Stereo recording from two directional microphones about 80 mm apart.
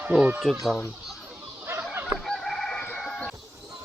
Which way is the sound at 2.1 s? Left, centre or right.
Centre.